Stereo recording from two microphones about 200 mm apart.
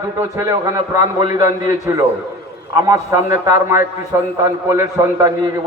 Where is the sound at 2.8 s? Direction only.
15° right (ahead or behind).